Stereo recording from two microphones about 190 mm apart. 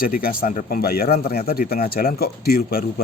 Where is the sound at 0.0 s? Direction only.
50° left (ahead or behind).